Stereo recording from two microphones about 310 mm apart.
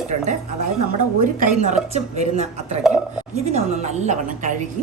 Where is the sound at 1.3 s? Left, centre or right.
Right.